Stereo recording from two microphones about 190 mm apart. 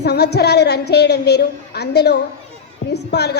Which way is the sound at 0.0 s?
60° left (ahead or behind).